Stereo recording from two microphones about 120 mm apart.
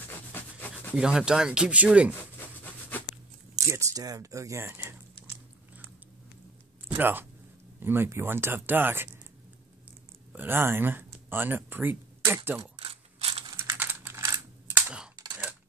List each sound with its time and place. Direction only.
0.1 s rub: 15° left (ahead or behind)
0.9 s speech: 5° right (ahead or behind)
2.1 s a sound: 15° left (ahead or behind)
3.5 s speech: 25° right (ahead or behind)
7.0 s speech: 15° right (ahead or behind)
10.3 s speech: 15° right (ahead or behind)
12.7 s a sound: 55° right (ahead or behind)
13.6 s typing: 20° right (ahead or behind)